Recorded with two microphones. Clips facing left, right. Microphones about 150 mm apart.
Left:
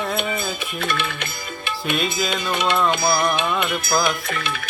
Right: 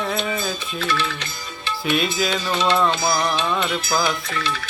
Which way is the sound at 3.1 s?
15° left (ahead or behind).